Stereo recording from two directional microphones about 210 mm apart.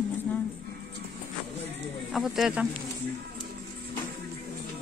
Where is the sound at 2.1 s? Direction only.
Centre (ahead or behind).